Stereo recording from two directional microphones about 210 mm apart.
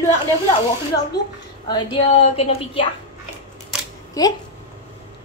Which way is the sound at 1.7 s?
25° left (ahead or behind).